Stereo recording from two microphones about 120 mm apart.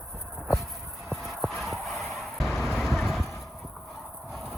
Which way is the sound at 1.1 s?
Centre (ahead or behind).